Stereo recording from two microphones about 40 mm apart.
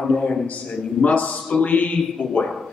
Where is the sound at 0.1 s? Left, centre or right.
Left.